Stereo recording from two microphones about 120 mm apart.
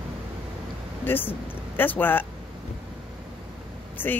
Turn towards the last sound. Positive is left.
turn(degrees=15)  # may be behind; listen again after turning